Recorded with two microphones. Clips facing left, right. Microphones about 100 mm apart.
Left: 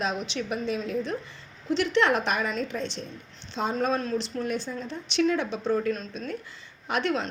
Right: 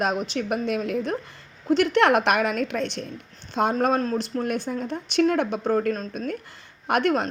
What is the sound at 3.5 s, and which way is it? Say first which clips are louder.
A woman's voice: right 5 dB; 55° right (ahead or behind).